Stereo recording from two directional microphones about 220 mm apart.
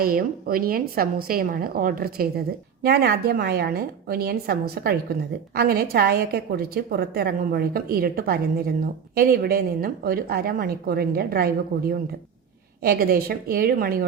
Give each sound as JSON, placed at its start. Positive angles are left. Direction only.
{"t": 0.0, "sound": "a woman's voice", "side_deg": -40}